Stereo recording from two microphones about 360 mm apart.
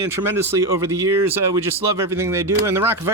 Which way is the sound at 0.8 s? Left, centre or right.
Right.